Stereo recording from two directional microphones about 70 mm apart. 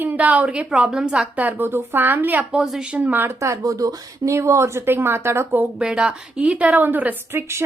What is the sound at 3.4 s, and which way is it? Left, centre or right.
Speech, right.